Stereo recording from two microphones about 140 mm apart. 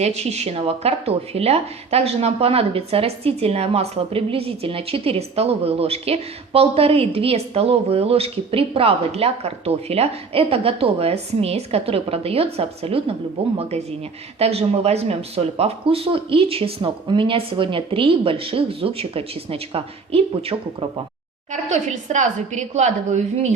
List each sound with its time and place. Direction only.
0.0 s speech: 50° right (ahead or behind)
21.5 s a woman's voice: 60° right (ahead or behind)